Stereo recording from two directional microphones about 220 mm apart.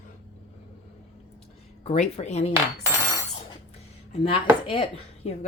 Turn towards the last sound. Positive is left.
turn(degrees=25)  # may be behind; listen again after turning